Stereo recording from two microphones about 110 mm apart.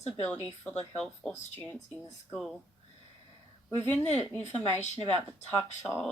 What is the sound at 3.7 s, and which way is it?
Speech, 20° left (ahead or behind).